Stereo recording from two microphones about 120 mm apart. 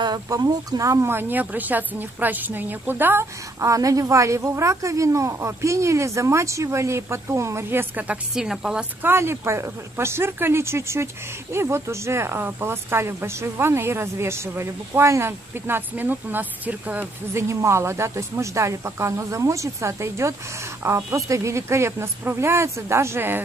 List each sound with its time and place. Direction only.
0.0 s speech: 35° right (ahead or behind); by 8.8 s 5° right (ahead or behind)
9.0 s speech: 20° right (ahead or behind)